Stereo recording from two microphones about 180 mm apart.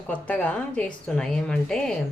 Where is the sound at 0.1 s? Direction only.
5° left (ahead or behind).